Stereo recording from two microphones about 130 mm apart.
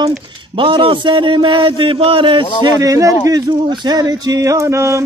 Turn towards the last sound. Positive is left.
turn(degrees=-20)  # may be behind; listen again after turning